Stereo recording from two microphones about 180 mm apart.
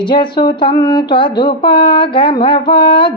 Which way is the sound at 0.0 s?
25° left (ahead or behind).